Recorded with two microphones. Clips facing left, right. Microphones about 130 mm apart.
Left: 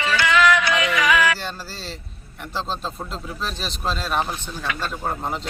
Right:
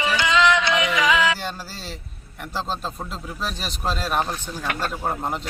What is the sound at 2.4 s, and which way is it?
Speech, 10° right (ahead or behind).